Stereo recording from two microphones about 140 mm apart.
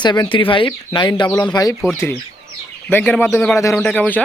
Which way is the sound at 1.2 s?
20° left (ahead or behind).